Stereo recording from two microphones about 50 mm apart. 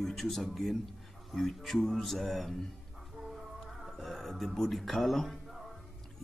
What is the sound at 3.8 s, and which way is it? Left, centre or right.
A man's voice, centre.